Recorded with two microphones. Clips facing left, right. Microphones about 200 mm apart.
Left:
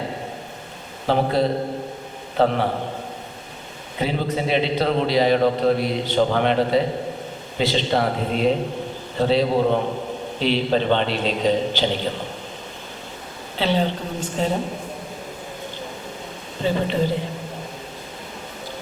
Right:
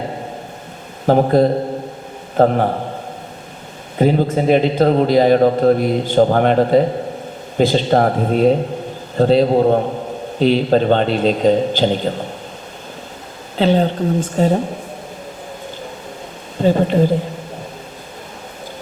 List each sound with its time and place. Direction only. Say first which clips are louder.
1.0 s a man's voice: right 7 dB; 45° right (ahead or behind)
3.9 s a man's voice: right 8 dB; 45° right (ahead or behind)
13.6 s a man's voice: right 7 dB; 45° right (ahead or behind)
16.6 s speech: right 7 dB; 45° right (ahead or behind)